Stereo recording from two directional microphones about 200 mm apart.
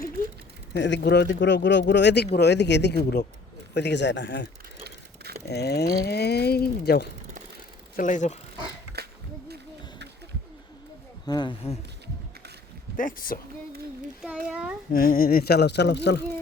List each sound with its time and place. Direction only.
0.8 s speech: 60° left (ahead or behind)
4.8 s bicycle: 50° right (ahead or behind)
5.5 s speech: 55° left (ahead or behind)
7.9 s speech: 40° left (ahead or behind)
11.3 s speech: 20° left (ahead or behind)
13.0 s speech: 45° left (ahead or behind)
14.2 s a child's voice: 5° right (ahead or behind)
14.9 s speech: 45° left (ahead or behind)